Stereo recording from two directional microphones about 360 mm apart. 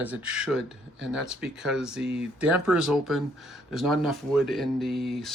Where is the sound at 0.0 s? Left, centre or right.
Centre.